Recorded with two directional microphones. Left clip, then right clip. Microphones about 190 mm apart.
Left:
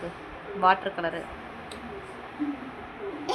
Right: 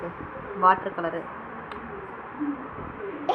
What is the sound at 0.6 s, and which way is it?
Speech, 25° left (ahead or behind).